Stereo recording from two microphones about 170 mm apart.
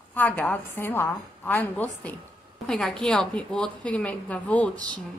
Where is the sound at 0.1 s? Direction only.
10° left (ahead or behind).